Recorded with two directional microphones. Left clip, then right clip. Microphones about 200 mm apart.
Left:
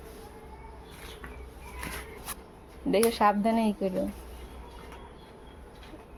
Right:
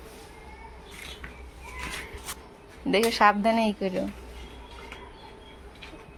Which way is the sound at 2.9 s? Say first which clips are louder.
Right 3 dB; 5° right (ahead or behind).